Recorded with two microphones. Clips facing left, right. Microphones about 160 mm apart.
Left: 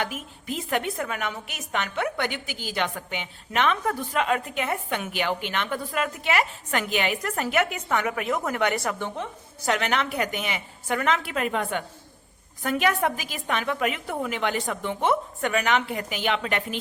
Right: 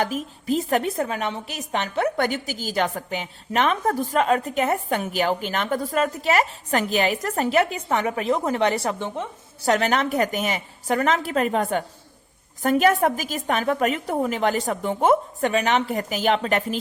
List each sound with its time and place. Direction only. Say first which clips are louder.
0.0 s a woman's voice: right 6 dB; 40° right (ahead or behind)
9.6 s a woman's voice: right 4 dB; 35° right (ahead or behind)